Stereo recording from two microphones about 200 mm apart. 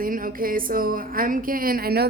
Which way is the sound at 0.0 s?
45° right (ahead or behind).